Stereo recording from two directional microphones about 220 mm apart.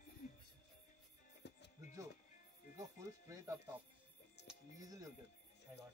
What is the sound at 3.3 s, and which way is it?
Speech, 15° right (ahead or behind).